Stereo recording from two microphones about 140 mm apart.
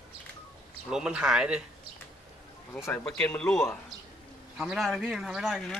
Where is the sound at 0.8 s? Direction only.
5° right (ahead or behind).